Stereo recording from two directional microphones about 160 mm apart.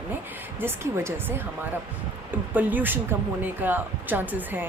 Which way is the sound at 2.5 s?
10° right (ahead or behind).